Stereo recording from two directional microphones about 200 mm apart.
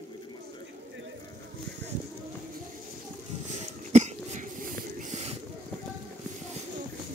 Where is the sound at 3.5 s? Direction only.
35° right (ahead or behind).